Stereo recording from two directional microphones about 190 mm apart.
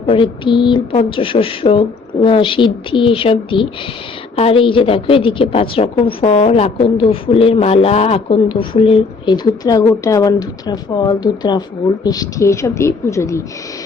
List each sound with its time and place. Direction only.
0.0 s a woman's voice: 30° left (ahead or behind)